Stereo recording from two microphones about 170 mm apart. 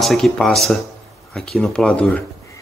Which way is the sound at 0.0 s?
Centre (ahead or behind).